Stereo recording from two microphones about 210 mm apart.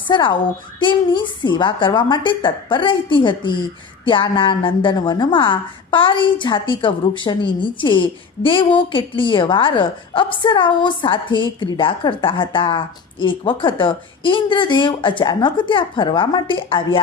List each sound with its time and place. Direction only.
0.1 s a woman's voice: 20° left (ahead or behind)